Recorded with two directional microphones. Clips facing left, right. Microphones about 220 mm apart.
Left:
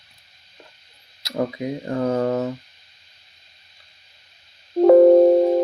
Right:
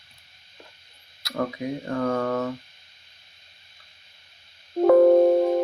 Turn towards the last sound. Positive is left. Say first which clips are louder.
# left 4 dB
turn(degrees=25)  # may be behind; listen again after turning